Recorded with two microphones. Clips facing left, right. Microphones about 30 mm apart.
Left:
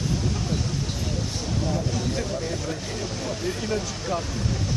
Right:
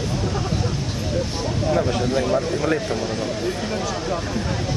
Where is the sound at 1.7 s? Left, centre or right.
Right.